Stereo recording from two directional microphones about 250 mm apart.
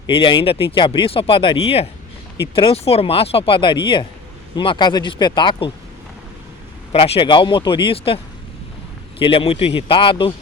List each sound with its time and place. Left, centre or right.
0.1 s speech: centre
6.9 s speech: left